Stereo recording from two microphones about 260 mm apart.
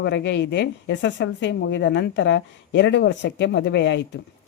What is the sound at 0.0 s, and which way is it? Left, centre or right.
Speech, left.